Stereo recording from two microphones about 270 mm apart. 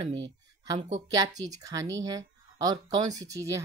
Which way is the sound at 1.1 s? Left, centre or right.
Centre.